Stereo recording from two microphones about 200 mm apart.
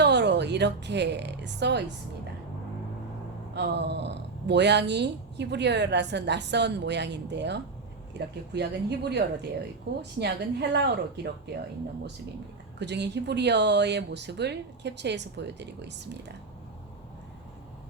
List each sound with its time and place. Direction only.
0.0 s a woman's voice: 60° right (ahead or behind)
3.5 s speech: 55° right (ahead or behind)
12.8 s speech: 60° right (ahead or behind)